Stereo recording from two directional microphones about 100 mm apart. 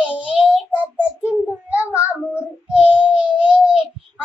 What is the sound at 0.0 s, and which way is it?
Child singing, 10° right (ahead or behind).